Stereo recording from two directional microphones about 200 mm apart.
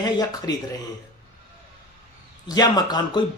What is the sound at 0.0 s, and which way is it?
Speech, 20° left (ahead or behind).